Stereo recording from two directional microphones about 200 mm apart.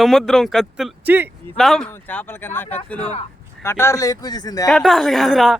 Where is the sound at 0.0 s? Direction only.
Centre (ahead or behind).